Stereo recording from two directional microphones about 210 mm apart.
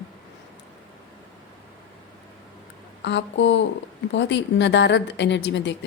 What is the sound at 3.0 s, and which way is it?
A woman's voice, 60° left (ahead or behind).